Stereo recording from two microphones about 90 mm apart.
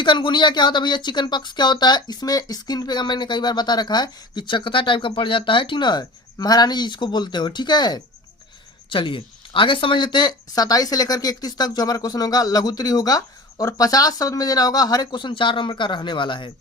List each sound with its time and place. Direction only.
0.0 s speech: 60° left (ahead or behind)
8.9 s speech: 70° left (ahead or behind)